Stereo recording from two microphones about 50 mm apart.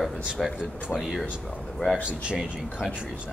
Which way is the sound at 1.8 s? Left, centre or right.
Left.